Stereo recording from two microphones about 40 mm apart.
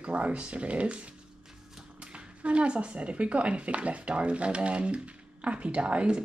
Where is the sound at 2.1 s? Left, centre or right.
Right.